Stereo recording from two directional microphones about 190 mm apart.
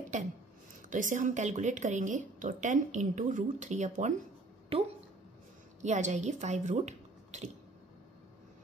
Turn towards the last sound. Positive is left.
turn(degrees=-35)  # may be behind; listen again after turning